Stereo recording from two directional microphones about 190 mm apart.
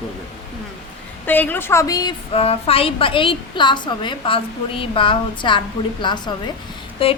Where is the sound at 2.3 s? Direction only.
30° left (ahead or behind).